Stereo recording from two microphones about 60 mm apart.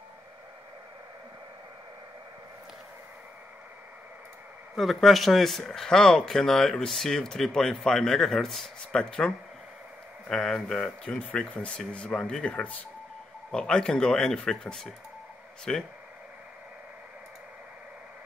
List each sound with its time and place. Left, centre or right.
4.7 s speech: centre
10.2 s speech: centre